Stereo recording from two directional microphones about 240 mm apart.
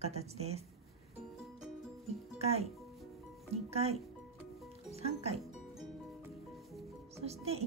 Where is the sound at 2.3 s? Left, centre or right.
Right.